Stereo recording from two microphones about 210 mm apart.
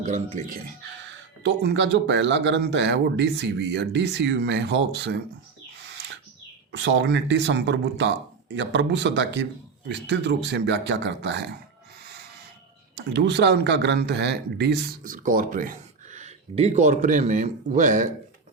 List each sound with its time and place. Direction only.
0.0 s speech: 35° right (ahead or behind)
1.4 s speech: 55° right (ahead or behind)
5.9 s bird: 55° right (ahead or behind)
6.7 s speech: 60° right (ahead or behind)
13.1 s speech: 55° right (ahead or behind); by 18.1 s 40° right (ahead or behind)